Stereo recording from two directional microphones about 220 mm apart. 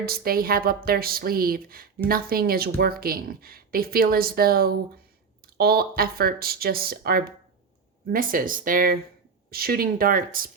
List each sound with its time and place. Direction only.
0.0 s speech: 45° right (ahead or behind)